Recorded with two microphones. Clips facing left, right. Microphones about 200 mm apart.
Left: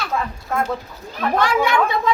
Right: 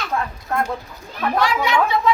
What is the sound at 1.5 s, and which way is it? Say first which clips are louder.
Speech: left 1 dB; 50° left (ahead or behind).